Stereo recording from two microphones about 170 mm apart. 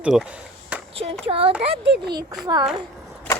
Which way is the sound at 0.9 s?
35° right (ahead or behind).